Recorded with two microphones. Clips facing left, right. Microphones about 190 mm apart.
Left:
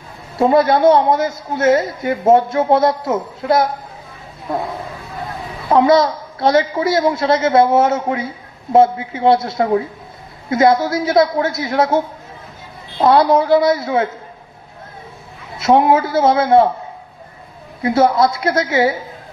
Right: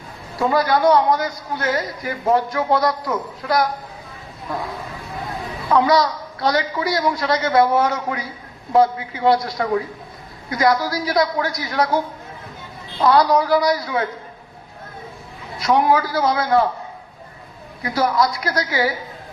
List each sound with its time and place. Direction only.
0.4 s a man's voice: 25° left (ahead or behind)
5.7 s a man's voice: 25° left (ahead or behind)
13.0 s a man's voice: 25° left (ahead or behind)
15.5 s a man's voice: 25° left (ahead or behind)
17.8 s a man's voice: 25° left (ahead or behind)